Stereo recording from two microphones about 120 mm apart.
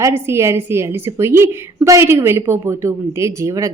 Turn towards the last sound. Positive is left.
turn(degrees=-25)  # may be behind; listen again after turning